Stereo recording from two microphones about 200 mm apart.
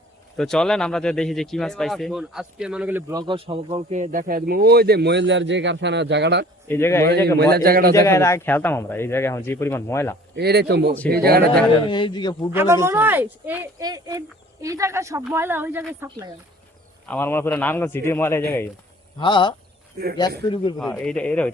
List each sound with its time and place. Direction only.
0.3 s speech: 5° left (ahead or behind); by 6.4 s 60° right (ahead or behind)
6.7 s speech: 10° left (ahead or behind)
7.3 s a man's voice: 50° right (ahead or behind)
7.9 s speech: 15° left (ahead or behind)
10.3 s a man's voice: 55° right (ahead or behind)
11.9 s speech: 25° left (ahead or behind)
12.5 s speech: 15° right (ahead or behind)
17.1 s speech: 10° left (ahead or behind)
19.2 s speech: 25° left (ahead or behind)
21.0 s a man's voice: 5° left (ahead or behind)